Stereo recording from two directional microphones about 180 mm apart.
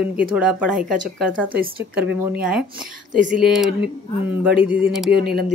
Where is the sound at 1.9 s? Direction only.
10° right (ahead or behind).